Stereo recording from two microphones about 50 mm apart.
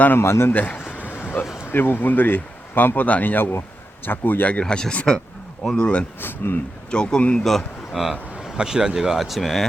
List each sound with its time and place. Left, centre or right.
0.2 s speech: left
0.5 s speech: left
0.9 s a sound: left
1.6 s speech: left
4.6 s speech: centre
6.1 s speech: left
6.9 s speech: centre
7.3 s speech: centre
8.5 s speech: centre
9.1 s speech: centre